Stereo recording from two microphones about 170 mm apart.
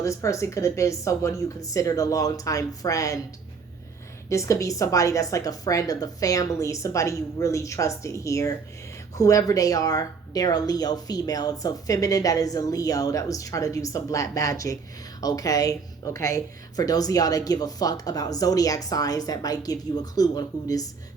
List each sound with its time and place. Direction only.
0.0 s speech: 20° left (ahead or behind)
4.3 s speech: 15° left (ahead or behind)